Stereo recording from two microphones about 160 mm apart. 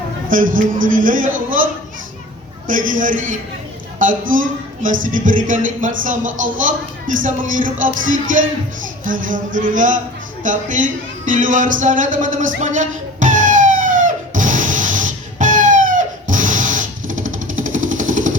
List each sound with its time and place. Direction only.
0.3 s speech: 60° right (ahead or behind)
2.6 s a woman's voice: 55° right (ahead or behind)
11.3 s music: 55° right (ahead or behind)